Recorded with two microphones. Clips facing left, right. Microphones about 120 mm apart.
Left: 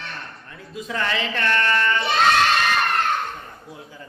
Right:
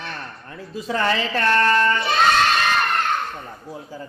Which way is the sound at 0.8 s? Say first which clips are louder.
Right 4 dB; 35° right (ahead or behind).